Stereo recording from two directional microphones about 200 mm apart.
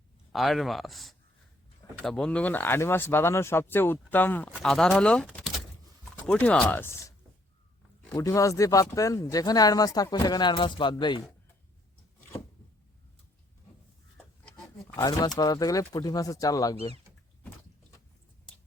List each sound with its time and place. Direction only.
0.3 s speech: centre (ahead or behind)
8.1 s speech: 15° left (ahead or behind)
14.4 s pig: 5° left (ahead or behind)
14.9 s speech: 20° left (ahead or behind)